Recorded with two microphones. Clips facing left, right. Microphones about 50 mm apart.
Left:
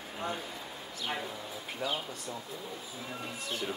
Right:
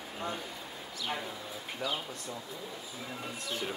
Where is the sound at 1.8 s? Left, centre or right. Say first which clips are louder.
Left 1 dB; left.